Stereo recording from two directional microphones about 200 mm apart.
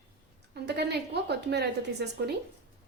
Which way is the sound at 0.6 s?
55° right (ahead or behind).